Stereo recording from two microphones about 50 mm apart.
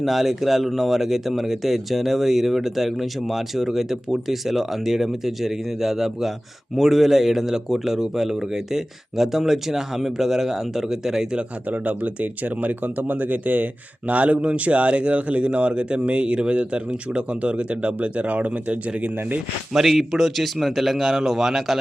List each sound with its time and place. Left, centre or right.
0.0 s speech: centre
11.3 s speech: right
19.7 s speech: centre